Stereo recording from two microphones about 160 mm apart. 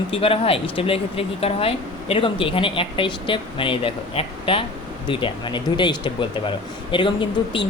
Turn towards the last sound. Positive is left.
turn(degrees=30)  # may be behind; listen again after turning